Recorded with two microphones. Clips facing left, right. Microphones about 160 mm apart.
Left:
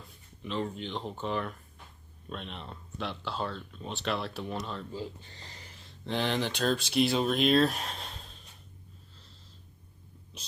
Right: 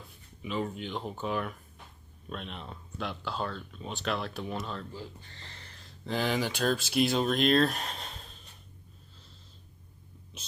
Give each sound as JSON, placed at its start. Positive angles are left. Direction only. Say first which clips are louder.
{"t": 0.4, "sound": "speech", "louder": "even", "side_deg": -5}
{"t": 4.9, "sound": "speech", "louder": "left 4 dB", "side_deg": 20}